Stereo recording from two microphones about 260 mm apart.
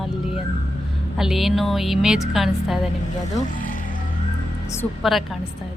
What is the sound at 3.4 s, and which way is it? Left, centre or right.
Speech, left.